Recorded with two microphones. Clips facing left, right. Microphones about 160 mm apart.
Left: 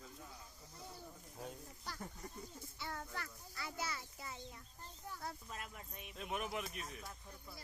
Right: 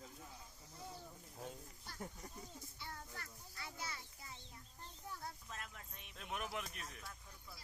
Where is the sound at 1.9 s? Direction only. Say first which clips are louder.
Left 2 dB; 90° left.